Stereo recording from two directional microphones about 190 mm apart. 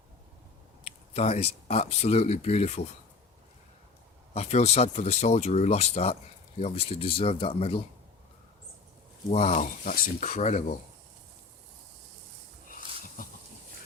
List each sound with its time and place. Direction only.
0.9 s speech: 35° left (ahead or behind)
4.4 s speech: 35° left (ahead or behind)
9.3 s speech: 35° left (ahead or behind)
13.2 s a sound: 45° left (ahead or behind)